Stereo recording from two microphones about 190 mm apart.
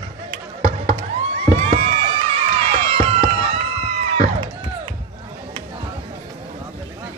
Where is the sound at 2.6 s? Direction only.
30° right (ahead or behind).